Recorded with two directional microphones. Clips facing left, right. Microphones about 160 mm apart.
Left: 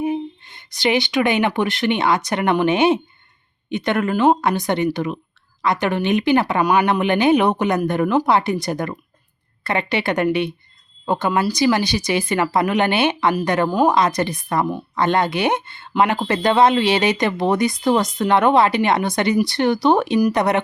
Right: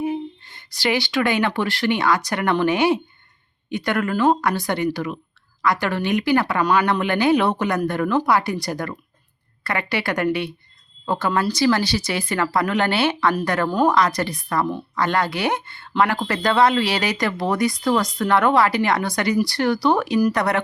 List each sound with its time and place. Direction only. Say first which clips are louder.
0.0 s a woman's voice: left 2 dB; 20° left (ahead or behind)